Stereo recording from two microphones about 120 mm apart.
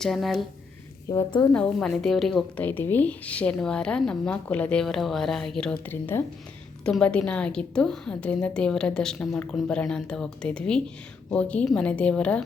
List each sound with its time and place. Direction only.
0.0 s a woman's voice: centre (ahead or behind)
1.1 s a woman's voice: 35° left (ahead or behind)
1.5 s a woman's voice: 5° left (ahead or behind)
2.6 s a woman's voice: 15° left (ahead or behind)